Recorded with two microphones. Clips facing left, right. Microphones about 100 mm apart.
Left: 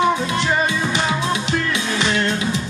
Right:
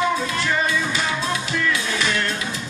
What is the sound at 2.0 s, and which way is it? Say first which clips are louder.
Music: left 3 dB; 20° left (ahead or behind).